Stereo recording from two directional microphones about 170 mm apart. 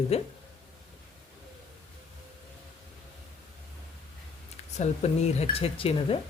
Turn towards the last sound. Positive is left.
turn(degrees=35)  # may be behind; listen again after turning